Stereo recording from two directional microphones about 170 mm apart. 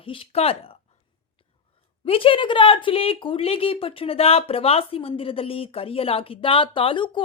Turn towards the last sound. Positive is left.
turn(degrees=30)  # may be behind; listen again after turning